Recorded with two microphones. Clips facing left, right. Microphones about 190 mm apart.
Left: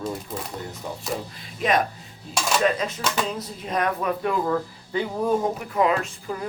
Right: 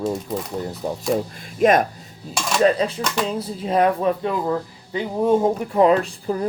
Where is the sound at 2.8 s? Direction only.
30° right (ahead or behind).